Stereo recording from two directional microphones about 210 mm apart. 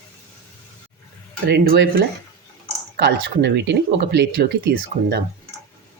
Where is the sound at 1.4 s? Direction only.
50° right (ahead or behind).